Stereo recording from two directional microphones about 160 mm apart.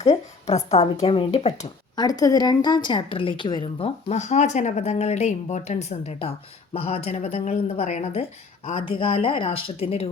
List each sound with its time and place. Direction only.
0.0 s a sound: 40° left (ahead or behind)
1.0 s a woman's voice: 35° left (ahead or behind)
2.0 s a woman's voice: 25° left (ahead or behind)